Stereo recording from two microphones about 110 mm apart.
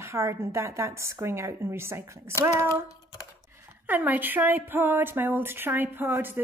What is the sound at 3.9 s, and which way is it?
Speech, 15° right (ahead or behind).